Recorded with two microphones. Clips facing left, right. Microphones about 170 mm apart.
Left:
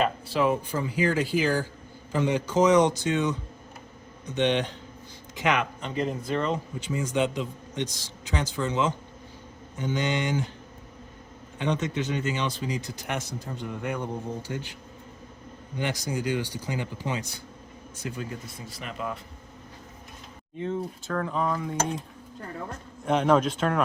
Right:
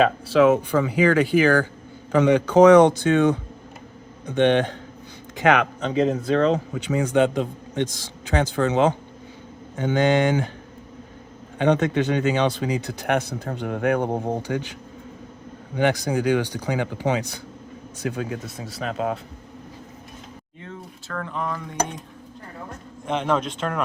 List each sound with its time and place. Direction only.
0.0 s a man's voice: 90° right; by 5.6 s 55° right (ahead or behind)
5.8 s speech: 90° right; by 10.5 s 60° right (ahead or behind)
11.5 s speech: 60° right (ahead or behind); by 14.8 s 80° right
15.7 s speech: 65° right (ahead or behind)
18.0 s speech: 80° right
21.1 s speech: 10° left (ahead or behind)
23.0 s speech: 5° left (ahead or behind)